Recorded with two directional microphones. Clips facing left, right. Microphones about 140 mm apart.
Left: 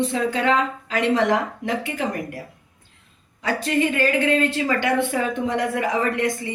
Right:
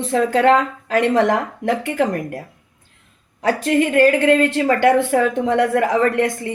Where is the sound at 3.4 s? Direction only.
50° right (ahead or behind).